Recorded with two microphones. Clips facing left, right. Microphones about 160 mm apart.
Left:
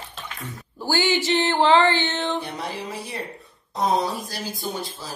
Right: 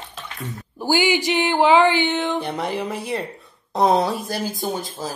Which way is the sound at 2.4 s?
55° right (ahead or behind).